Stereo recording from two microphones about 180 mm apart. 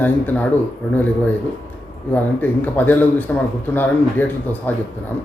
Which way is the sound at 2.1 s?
10° left (ahead or behind).